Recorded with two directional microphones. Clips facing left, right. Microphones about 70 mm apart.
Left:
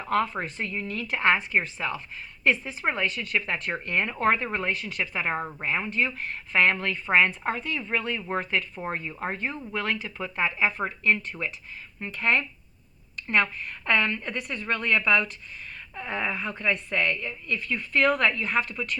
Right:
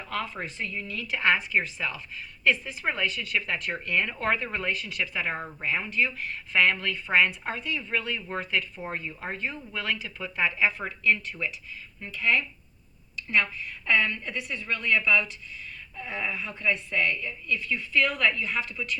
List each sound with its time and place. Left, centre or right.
0.0 s a woman's voice: left